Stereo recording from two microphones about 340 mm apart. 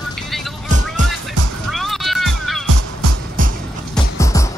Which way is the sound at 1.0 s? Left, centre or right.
Right.